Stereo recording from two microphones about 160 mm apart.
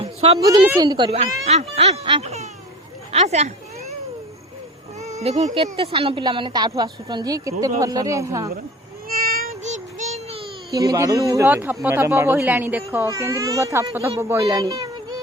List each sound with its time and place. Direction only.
0.0 s a sound: 35° right (ahead or behind)
0.3 s speech: 25° right (ahead or behind); by 2.5 s 45° right (ahead or behind)
3.1 s cat: 45° right (ahead or behind)
4.9 s speech: 45° right (ahead or behind); by 8.4 s 20° right (ahead or behind)
9.0 s child singing: 65° right (ahead or behind)
9.6 s child singing: 45° right (ahead or behind)
10.7 s speech: 20° right (ahead or behind)